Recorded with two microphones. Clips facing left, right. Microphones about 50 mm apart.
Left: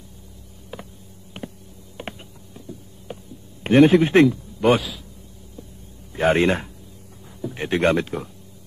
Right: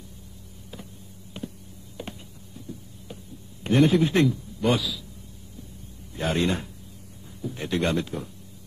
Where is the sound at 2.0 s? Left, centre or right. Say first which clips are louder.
Left 3 dB; left.